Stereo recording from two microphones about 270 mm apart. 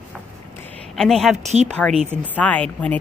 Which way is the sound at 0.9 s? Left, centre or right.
Centre.